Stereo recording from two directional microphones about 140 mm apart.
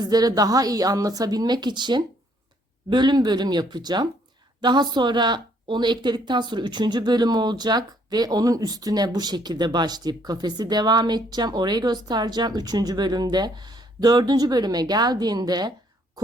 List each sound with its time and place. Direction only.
0.0 s a woman's voice: 30° right (ahead or behind)